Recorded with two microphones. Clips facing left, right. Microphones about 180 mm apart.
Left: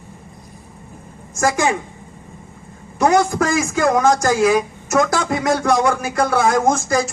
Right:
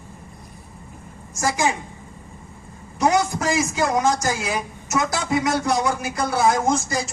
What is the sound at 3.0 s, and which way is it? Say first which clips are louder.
Speech: left 5 dB; 50° left (ahead or behind).